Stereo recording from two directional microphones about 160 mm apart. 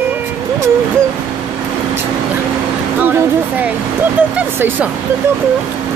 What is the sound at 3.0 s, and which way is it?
Speech, 10° right (ahead or behind).